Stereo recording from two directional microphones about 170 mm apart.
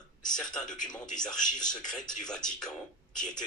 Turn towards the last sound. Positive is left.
turn(degrees=5)  # may be behind; listen again after turning